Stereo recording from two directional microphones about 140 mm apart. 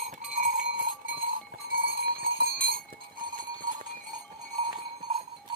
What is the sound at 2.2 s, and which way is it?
Cowbell, 90° right.